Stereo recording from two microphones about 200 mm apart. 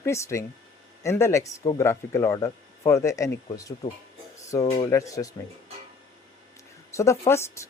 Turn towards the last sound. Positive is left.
turn(degrees=15)  # may be behind; listen again after turning